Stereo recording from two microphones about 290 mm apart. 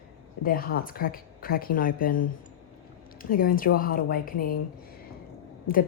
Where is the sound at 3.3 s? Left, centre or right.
Left.